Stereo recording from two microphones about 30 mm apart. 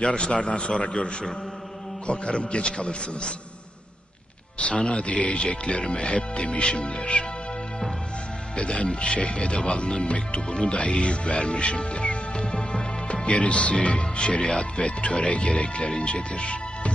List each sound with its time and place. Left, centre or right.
0.0 s speech: left
4.6 s speech: left
8.5 s speech: left
9.8 s music: left
13.7 s speech: left